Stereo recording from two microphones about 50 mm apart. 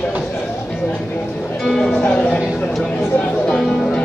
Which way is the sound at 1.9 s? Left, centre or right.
Left.